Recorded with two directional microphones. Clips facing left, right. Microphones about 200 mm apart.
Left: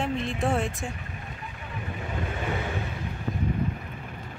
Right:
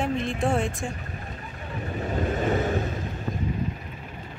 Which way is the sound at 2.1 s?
40° right (ahead or behind).